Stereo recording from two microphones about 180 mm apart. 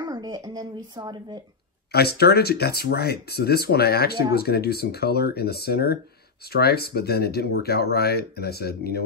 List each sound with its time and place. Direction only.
0.1 s speech: 25° right (ahead or behind)
1.9 s speech: 60° left (ahead or behind)